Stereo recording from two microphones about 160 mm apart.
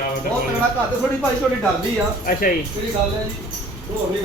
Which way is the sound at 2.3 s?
60° left (ahead or behind).